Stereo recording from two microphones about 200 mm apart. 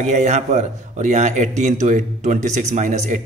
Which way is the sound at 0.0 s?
35° right (ahead or behind).